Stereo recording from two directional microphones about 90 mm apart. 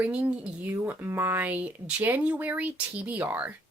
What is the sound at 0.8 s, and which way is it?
Speech, 25° right (ahead or behind).